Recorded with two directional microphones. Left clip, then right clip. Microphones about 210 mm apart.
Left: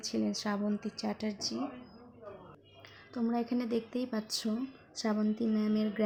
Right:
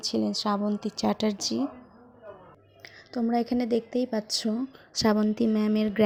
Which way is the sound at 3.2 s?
25° right (ahead or behind).